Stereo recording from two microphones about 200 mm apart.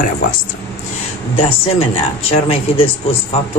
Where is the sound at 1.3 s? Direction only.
30° left (ahead or behind).